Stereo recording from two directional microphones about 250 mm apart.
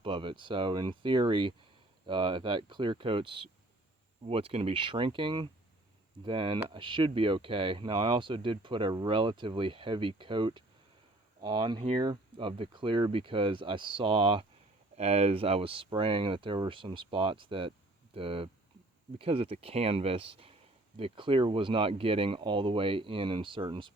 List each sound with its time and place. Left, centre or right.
0.0 s speech: right